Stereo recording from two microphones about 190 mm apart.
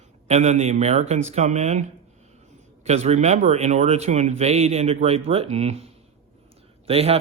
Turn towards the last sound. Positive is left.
turn(degrees=-30)  # may be behind; listen again after turning